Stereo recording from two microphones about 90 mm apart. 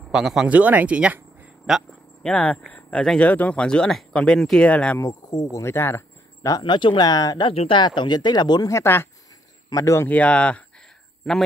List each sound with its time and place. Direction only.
0.1 s speech: 5° right (ahead or behind)
0.5 s speech: 15° right (ahead or behind)
2.2 s speech: 10° left (ahead or behind)
5.2 s speech: 45° left (ahead or behind)
6.6 s speech: 65° left (ahead or behind); by 7.4 s 45° left (ahead or behind)
7.4 s speech: 80° left
7.8 s speech: 55° left (ahead or behind)
8.6 s speech: 30° left (ahead or behind)
9.7 s speech: 40° left (ahead or behind)
10.0 s speech: 15° left (ahead or behind)